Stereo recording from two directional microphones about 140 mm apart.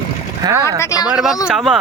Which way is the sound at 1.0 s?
5° right (ahead or behind).